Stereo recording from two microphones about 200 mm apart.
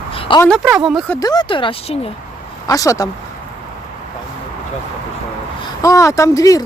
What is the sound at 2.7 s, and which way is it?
Speech, 15° left (ahead or behind).